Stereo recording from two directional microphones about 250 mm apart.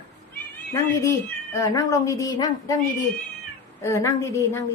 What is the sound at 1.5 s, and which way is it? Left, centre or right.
A woman's voice, centre.